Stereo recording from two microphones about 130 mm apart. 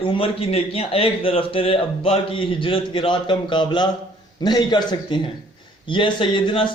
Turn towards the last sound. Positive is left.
turn(degrees=40)  # may be behind; listen again after turning